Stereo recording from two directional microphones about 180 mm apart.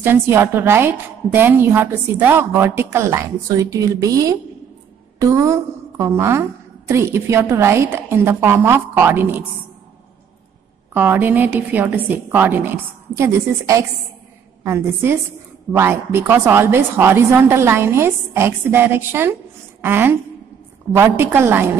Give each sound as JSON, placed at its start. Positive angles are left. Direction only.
{"t": 0.0, "sound": "a woman's voice", "side_deg": -15}
{"t": 10.9, "sound": "a woman's voice", "side_deg": -10}